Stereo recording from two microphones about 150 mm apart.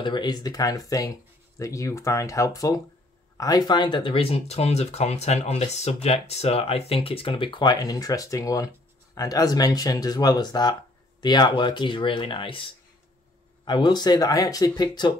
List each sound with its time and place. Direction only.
0.0 s speech: 30° left (ahead or behind)
13.7 s speech: 30° left (ahead or behind)